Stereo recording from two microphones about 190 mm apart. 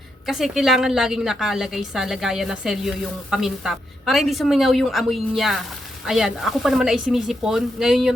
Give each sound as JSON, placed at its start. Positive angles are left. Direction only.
{"t": 0.3, "sound": "a woman's voice", "side_deg": 0}